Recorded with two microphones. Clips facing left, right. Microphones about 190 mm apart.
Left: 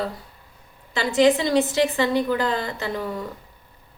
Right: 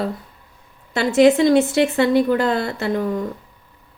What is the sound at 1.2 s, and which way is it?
A woman's voice, 50° right (ahead or behind).